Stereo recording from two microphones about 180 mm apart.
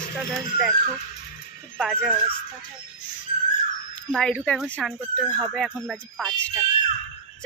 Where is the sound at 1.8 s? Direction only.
Centre (ahead or behind).